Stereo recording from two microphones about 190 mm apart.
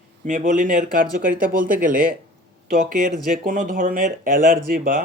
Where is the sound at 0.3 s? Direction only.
45° right (ahead or behind).